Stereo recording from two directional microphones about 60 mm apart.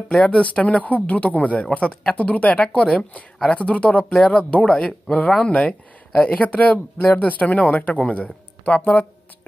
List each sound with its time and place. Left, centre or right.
0.1 s speech: centre
0.4 s speech: left